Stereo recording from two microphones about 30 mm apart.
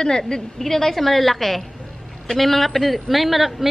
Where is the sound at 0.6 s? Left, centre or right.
Centre.